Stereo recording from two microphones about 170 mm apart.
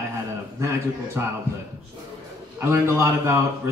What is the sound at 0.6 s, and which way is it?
Speech, 15° right (ahead or behind).